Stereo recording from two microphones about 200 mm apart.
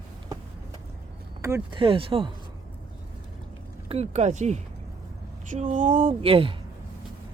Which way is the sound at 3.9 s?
35° right (ahead or behind).